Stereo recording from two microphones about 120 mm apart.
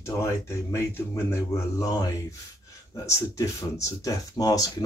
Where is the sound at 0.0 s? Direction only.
25° left (ahead or behind).